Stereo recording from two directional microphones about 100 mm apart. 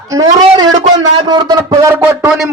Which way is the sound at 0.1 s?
40° right (ahead or behind).